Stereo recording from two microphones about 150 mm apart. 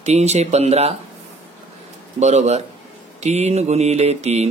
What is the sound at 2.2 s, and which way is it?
Speech, 50° right (ahead or behind).